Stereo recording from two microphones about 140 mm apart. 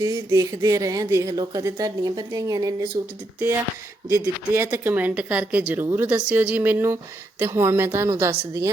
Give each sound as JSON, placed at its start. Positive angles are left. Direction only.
{"t": 0.0, "sound": "speech", "side_deg": -20}
{"t": 4.5, "sound": "a woman's voice", "side_deg": -15}